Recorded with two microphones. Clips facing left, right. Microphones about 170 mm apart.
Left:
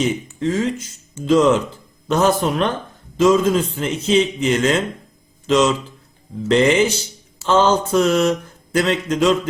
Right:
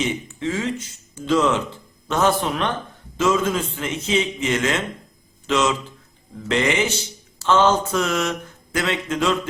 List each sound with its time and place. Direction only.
0.0 s speech: 40° left (ahead or behind)